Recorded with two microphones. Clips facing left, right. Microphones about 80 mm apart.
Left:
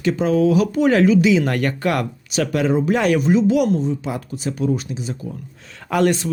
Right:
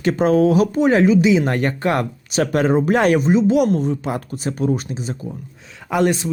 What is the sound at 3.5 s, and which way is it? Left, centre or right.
Speech, right.